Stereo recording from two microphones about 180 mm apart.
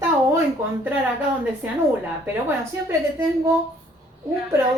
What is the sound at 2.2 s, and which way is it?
A woman's voice, 10° right (ahead or behind).